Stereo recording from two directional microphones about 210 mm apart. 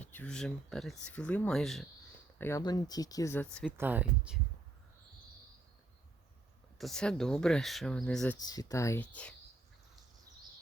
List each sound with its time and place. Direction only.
0.0 s speech: 10° left (ahead or behind)
2.4 s speech: 15° left (ahead or behind)
3.7 s speech: 10° right (ahead or behind)
6.7 s speech: centre (ahead or behind)
8.4 s speech: 20° left (ahead or behind)